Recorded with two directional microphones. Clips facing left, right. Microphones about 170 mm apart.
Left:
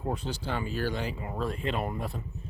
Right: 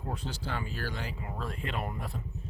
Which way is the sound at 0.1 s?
20° left (ahead or behind).